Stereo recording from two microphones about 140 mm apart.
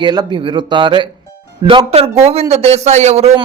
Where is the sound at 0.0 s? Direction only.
30° right (ahead or behind).